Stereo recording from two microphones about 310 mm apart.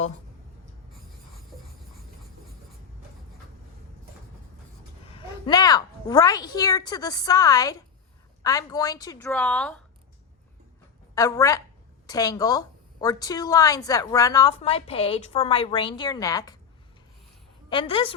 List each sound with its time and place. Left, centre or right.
0.6 s a sound: centre
5.1 s a woman's voice: centre
11.1 s a woman's voice: centre
17.7 s a woman's voice: centre